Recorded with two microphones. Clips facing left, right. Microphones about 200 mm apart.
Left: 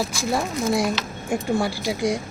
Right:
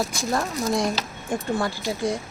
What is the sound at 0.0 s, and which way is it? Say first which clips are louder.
Speech: left 1 dB; 10° left (ahead or behind).